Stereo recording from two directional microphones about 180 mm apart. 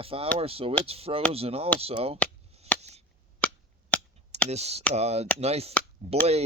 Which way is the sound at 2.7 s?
10° left (ahead or behind).